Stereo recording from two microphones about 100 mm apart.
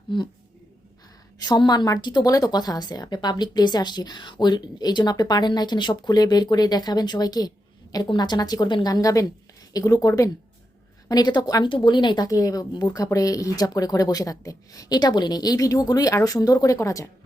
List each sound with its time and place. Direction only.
1.4 s a woman's voice: 45° left (ahead or behind)